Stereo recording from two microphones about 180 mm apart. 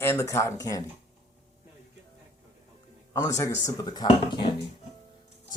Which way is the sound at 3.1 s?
15° left (ahead or behind).